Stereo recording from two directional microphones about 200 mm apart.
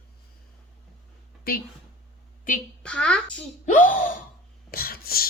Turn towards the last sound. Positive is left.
turn(degrees=50)  # may be behind; listen again after turning